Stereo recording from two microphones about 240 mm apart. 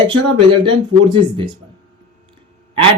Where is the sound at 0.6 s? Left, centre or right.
Right.